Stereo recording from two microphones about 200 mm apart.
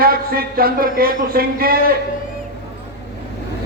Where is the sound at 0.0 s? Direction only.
45° right (ahead or behind).